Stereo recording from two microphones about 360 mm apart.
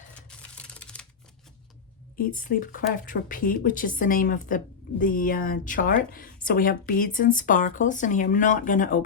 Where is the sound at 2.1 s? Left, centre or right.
Left.